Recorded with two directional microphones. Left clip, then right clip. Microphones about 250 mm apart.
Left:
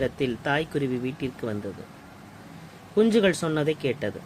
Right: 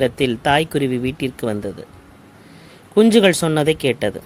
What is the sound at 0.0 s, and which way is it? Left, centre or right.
Speech, right.